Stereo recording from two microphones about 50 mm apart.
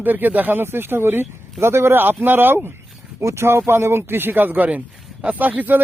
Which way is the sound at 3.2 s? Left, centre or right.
Right.